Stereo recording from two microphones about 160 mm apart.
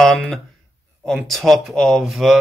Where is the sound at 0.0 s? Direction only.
5° left (ahead or behind).